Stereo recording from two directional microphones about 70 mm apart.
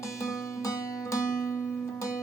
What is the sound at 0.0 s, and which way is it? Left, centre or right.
Music, left.